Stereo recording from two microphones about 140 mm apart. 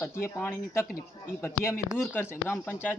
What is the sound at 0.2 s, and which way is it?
Speech, 15° left (ahead or behind).